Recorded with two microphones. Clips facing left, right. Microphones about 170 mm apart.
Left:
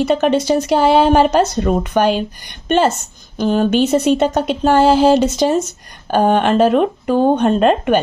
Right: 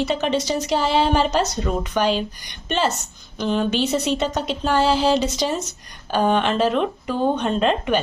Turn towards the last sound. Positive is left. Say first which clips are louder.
# left 7 dB
turn(degrees=50)  # may be behind; listen again after turning